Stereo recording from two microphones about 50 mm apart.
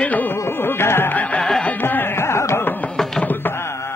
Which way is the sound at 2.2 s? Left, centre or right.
Left.